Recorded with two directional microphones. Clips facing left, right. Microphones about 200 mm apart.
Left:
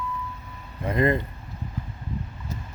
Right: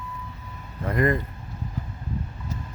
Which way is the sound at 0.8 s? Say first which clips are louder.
Left 1 dB; 20° left (ahead or behind).